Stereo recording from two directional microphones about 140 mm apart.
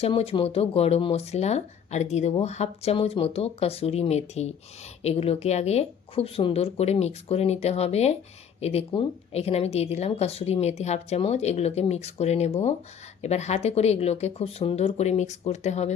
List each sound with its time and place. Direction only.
0.0 s speech: 45° left (ahead or behind)